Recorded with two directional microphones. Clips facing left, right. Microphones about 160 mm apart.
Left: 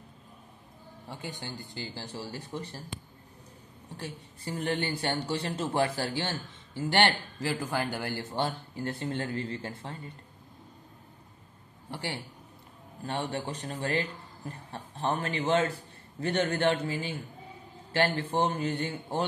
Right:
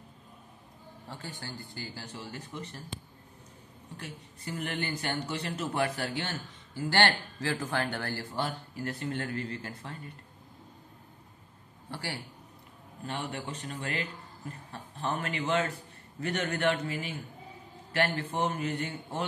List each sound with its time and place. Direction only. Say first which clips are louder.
1.0 s speech: left 3 dB; 15° left (ahead or behind)
2.1 s speech: left 4 dB; 35° left (ahead or behind)
3.9 s a man's voice: left 3 dB; 30° left (ahead or behind)
11.9 s a man's voice: left 2 dB; 20° left (ahead or behind)
13.0 s a man's voice: left 4 dB; 35° left (ahead or behind)